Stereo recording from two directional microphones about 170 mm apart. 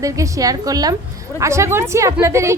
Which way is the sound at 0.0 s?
20° right (ahead or behind).